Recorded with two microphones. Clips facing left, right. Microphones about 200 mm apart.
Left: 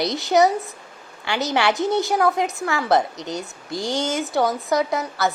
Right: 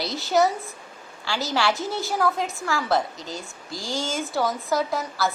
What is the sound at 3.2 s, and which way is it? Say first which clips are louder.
A woman's voice: left 6 dB; 20° left (ahead or behind).